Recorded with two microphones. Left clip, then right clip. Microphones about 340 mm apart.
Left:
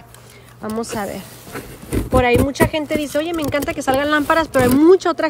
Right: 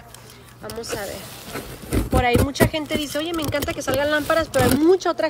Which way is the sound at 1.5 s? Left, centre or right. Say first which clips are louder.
Left 2 dB; centre.